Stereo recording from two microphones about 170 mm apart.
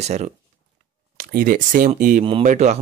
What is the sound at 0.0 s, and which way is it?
Speech, 40° right (ahead or behind).